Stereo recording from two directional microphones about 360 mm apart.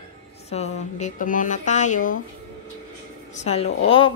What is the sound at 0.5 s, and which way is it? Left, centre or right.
Speech, centre.